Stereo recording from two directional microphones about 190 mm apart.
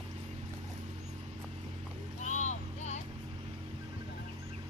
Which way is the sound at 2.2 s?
40° left (ahead or behind).